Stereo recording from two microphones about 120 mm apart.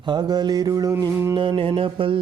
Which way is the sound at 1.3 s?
45° right (ahead or behind).